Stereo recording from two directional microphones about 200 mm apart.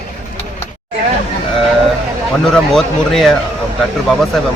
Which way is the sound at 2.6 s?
Centre (ahead or behind).